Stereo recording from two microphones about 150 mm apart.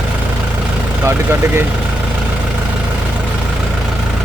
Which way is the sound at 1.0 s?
15° right (ahead or behind).